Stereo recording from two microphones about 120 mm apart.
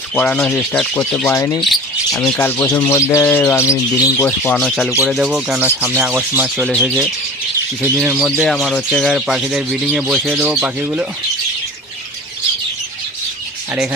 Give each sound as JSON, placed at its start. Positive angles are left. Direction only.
{"t": 0.2, "sound": "speech", "side_deg": 10}
{"t": 1.3, "sound": "speech", "side_deg": 25}
{"t": 1.6, "sound": "bird", "side_deg": 0}
{"t": 2.2, "sound": "speech", "side_deg": 15}
{"t": 4.5, "sound": "speech", "side_deg": 0}
{"t": 7.9, "sound": "speech", "side_deg": -20}
{"t": 8.1, "sound": "speech", "side_deg": 0}